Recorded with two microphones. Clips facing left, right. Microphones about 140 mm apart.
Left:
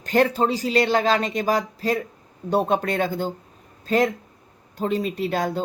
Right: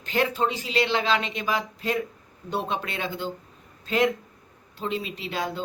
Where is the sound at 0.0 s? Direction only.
45° left (ahead or behind).